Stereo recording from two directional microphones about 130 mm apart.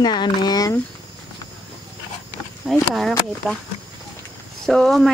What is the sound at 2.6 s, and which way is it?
Speech, centre (ahead or behind).